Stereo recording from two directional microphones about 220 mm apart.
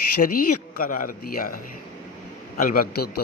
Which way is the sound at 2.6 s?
40° left (ahead or behind).